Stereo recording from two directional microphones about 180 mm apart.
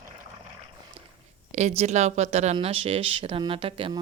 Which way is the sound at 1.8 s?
40° right (ahead or behind).